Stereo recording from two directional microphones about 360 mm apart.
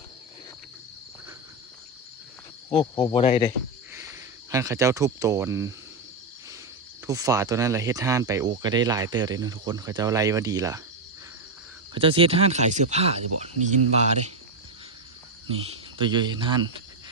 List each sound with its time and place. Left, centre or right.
2.6 s speech: centre
3.9 s speech: centre
7.1 s speech: centre
11.9 s speech: centre
16.0 s speech: centre